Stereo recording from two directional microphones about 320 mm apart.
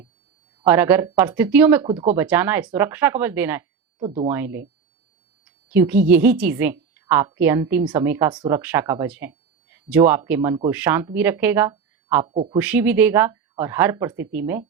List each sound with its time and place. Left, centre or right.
0.6 s a woman's voice: centre
4.0 s speech: centre
4.3 s a woman's voice: centre